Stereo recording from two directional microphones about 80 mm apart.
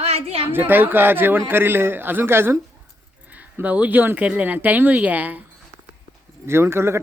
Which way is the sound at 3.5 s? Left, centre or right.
Centre.